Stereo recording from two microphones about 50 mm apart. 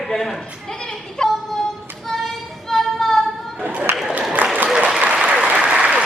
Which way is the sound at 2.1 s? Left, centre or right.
Centre.